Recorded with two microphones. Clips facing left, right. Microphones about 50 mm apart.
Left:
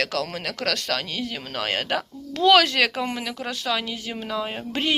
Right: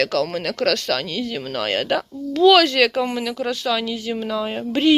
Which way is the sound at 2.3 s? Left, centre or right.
Left.